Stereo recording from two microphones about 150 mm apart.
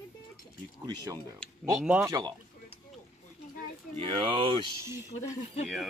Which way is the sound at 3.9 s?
35° right (ahead or behind).